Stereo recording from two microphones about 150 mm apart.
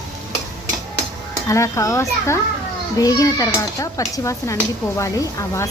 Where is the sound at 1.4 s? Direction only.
20° left (ahead or behind).